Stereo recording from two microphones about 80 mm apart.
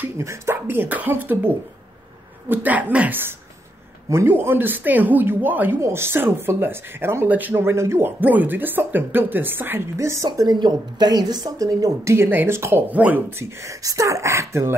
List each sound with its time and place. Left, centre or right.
0.2 s a woman's voice: right
2.5 s a woman's voice: right
8.2 s a woman's voice: right
9.9 s a woman's voice: right
12.0 s speech: right
12.9 s a woman's voice: centre
13.3 s speech: right